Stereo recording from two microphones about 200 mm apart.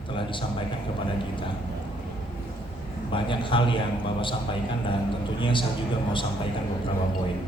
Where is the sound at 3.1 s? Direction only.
25° left (ahead or behind).